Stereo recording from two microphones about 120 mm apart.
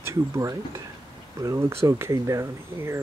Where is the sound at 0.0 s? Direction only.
25° right (ahead or behind).